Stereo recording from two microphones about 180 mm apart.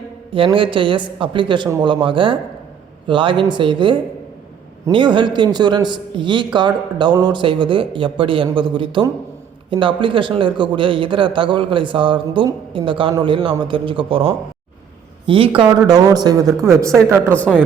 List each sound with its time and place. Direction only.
0.3 s speech: 30° right (ahead or behind)